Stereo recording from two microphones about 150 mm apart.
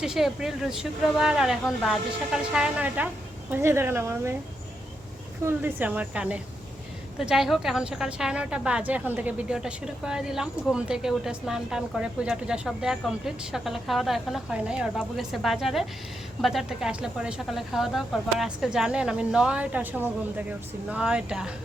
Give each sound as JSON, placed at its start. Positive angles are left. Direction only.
{"t": 0.0, "sound": "a woman's voice", "side_deg": -5}
{"t": 5.5, "sound": "a woman's voice", "side_deg": -15}